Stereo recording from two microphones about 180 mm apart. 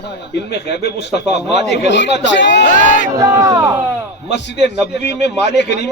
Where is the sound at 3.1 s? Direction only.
20° right (ahead or behind).